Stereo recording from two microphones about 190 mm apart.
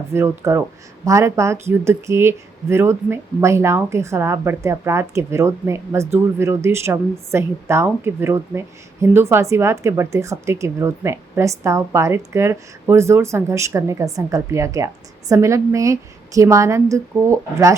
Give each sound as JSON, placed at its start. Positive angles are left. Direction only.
{"t": 0.1, "sound": "speech", "side_deg": -15}